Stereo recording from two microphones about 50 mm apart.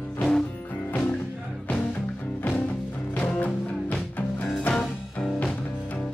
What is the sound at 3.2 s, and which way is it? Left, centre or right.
Music, left.